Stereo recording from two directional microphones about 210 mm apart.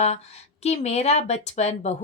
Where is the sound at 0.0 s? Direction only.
30° left (ahead or behind).